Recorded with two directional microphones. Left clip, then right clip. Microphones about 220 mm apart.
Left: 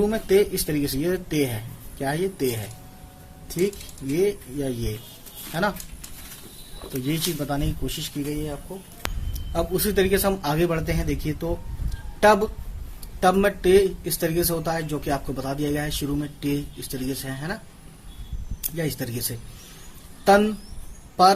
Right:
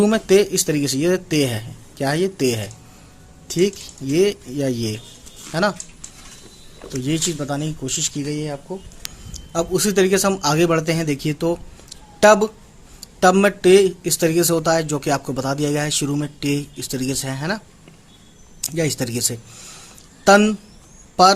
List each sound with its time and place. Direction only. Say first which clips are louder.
0.0 s speech: right 5 dB; 30° right (ahead or behind)
4.2 s speech: right 5 dB; 30° right (ahead or behind)
6.9 s a man's voice: right 4 dB; 20° right (ahead or behind)
18.8 s speech: right 7 dB; 30° right (ahead or behind)
20.2 s speech: right 4 dB; 30° right (ahead or behind)